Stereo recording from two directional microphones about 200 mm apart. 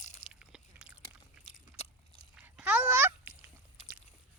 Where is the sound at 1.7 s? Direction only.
30° left (ahead or behind).